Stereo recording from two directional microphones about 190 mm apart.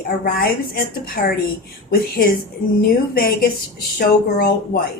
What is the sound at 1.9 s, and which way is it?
A woman's voice, 50° left (ahead or behind).